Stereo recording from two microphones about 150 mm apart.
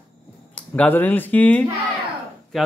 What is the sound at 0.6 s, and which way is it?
Speech, 10° left (ahead or behind).